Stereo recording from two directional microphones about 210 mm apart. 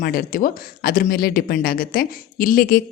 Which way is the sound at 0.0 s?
45° left (ahead or behind).